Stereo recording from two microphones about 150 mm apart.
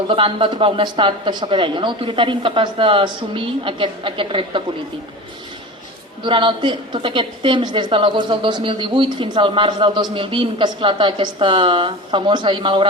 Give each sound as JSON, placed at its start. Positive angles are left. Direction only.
{"t": 0.1, "sound": "a woman's voice", "side_deg": -35}
{"t": 6.2, "sound": "a woman's voice", "side_deg": -35}